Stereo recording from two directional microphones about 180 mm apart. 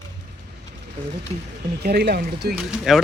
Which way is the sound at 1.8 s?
60° right (ahead or behind).